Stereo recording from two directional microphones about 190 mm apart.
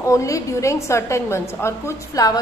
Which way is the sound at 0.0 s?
15° left (ahead or behind).